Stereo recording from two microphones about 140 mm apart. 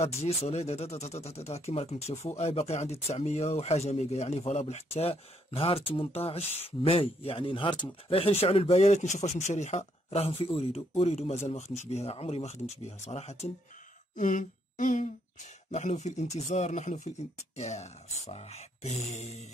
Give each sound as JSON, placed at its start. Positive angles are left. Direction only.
{"t": 0.0, "sound": "speech", "side_deg": 50}
{"t": 14.1, "sound": "speech", "side_deg": 65}
{"t": 15.7, "sound": "speech", "side_deg": 55}